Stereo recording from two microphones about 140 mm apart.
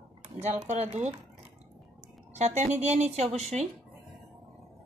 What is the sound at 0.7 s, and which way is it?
Speech, 50° right (ahead or behind).